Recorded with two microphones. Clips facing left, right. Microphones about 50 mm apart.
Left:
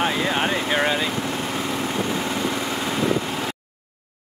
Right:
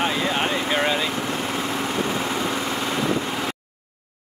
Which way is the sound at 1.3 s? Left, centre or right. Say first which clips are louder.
Even; centre.